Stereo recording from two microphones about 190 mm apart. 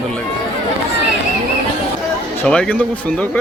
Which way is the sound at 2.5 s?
5° left (ahead or behind).